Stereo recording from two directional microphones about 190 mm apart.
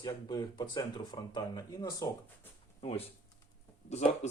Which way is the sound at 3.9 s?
35° left (ahead or behind).